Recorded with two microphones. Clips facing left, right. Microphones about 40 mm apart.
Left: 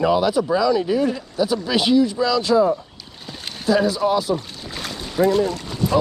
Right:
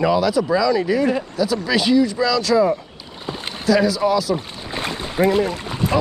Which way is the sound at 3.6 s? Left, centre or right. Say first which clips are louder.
Right 1 dB; right.